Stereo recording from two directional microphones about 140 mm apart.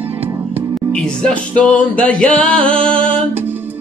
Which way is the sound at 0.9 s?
5° left (ahead or behind).